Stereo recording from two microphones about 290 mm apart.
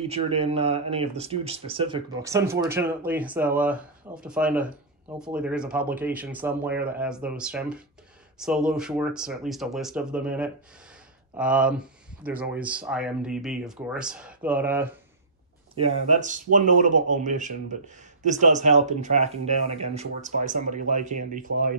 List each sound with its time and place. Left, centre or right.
0.1 s speech: right
15.7 s speech: right